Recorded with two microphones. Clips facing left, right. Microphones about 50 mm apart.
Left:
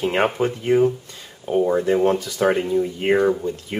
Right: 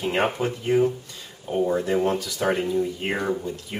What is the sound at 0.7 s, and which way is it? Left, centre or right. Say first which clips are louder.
Speech: left 3 dB; centre.